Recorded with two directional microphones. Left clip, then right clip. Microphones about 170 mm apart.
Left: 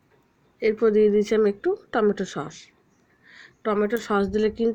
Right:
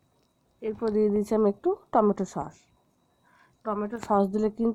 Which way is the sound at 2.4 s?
10° left (ahead or behind).